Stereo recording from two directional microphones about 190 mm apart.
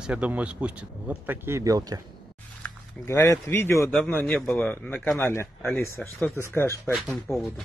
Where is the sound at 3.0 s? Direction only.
15° left (ahead or behind).